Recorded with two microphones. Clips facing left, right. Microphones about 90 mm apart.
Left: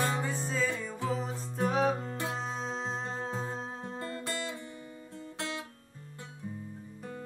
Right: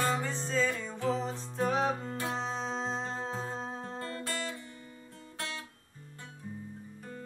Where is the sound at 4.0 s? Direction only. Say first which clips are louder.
Left 2 dB; 20° left (ahead or behind).